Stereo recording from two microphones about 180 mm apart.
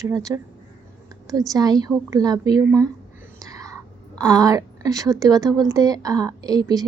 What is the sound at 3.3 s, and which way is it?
Whispering, 20° right (ahead or behind).